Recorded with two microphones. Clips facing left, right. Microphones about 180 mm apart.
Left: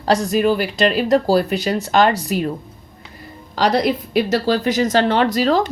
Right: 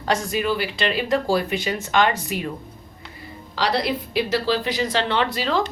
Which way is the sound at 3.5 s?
45° left (ahead or behind).